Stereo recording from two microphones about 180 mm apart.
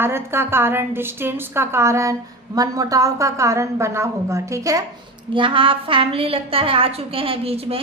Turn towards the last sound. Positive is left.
turn(degrees=-35)  # may be behind; listen again after turning